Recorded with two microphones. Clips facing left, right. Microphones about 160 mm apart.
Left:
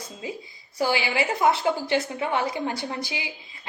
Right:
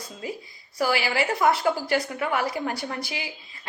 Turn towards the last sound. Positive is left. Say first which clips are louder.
# even
turn(degrees=20)  # may be behind; listen again after turning